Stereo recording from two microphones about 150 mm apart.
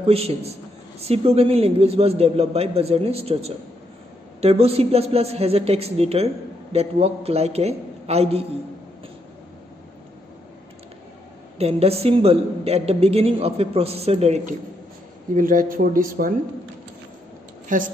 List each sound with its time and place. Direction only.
0.0 s speech: 45° right (ahead or behind)
11.5 s speech: 45° right (ahead or behind)
15.3 s speech: 65° right (ahead or behind)
17.7 s a woman's voice: 60° right (ahead or behind)